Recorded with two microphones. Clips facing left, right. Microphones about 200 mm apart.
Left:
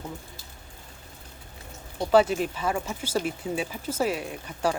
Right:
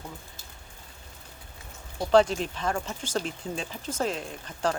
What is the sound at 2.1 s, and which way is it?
Speech, 5° left (ahead or behind).